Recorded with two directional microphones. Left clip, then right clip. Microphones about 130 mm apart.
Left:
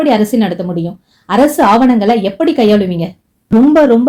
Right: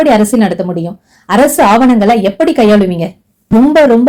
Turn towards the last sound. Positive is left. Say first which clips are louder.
# right 1 dB
turn(degrees=-40)  # may be behind; listen again after turning